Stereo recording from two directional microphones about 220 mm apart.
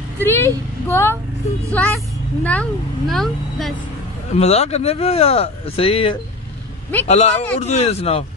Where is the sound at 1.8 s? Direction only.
5° left (ahead or behind).